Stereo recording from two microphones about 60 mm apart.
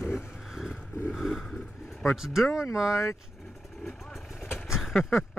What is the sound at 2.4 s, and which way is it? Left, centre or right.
Speech, left.